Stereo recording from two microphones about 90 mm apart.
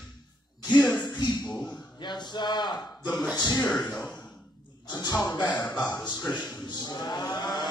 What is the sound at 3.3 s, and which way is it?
Speech, 50° left (ahead or behind).